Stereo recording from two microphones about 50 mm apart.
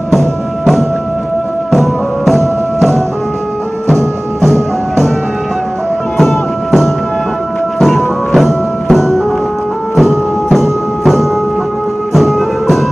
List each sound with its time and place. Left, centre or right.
1.7 s music: centre
4.4 s music: centre
7.8 s music: centre